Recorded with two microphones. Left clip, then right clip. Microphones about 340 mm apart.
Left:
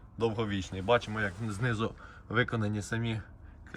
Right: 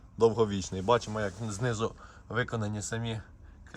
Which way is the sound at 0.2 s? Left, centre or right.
Centre.